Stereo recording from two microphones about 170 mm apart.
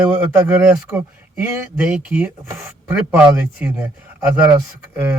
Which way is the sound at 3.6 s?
10° right (ahead or behind).